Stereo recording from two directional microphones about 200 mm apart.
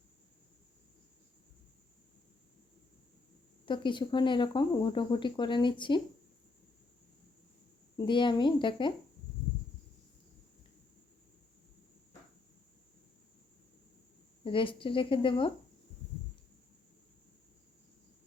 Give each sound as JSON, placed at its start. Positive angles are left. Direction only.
{"t": 3.7, "sound": "speech", "side_deg": 25}
{"t": 7.9, "sound": "speech", "side_deg": 25}
{"t": 14.4, "sound": "speech", "side_deg": 25}